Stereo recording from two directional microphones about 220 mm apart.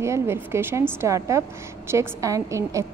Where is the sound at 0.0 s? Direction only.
10° right (ahead or behind).